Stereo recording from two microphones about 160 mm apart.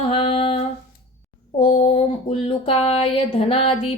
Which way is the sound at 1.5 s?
40° left (ahead or behind).